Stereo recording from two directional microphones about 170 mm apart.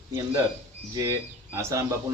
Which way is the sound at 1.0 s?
15° right (ahead or behind).